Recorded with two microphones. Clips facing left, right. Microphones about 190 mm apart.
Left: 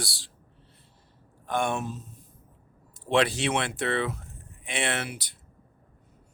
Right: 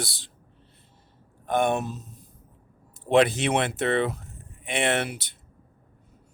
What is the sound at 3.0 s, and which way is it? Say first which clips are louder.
Speech: right 4 dB; 20° right (ahead or behind).